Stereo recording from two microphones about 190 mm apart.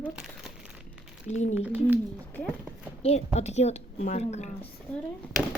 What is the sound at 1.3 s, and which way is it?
Speech, 40° left (ahead or behind).